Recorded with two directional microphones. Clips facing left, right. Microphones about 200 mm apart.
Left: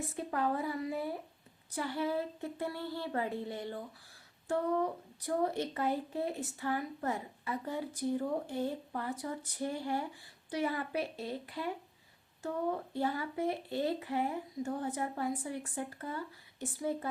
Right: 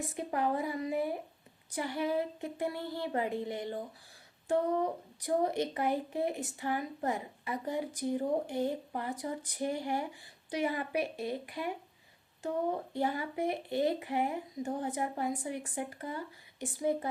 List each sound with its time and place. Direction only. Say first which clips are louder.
0.1 s speech: right 2 dB; 15° right (ahead or behind)